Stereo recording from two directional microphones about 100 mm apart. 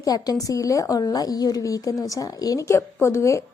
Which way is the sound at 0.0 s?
40° left (ahead or behind).